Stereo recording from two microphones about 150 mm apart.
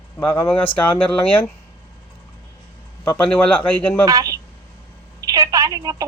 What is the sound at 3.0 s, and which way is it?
Speech, 5° left (ahead or behind).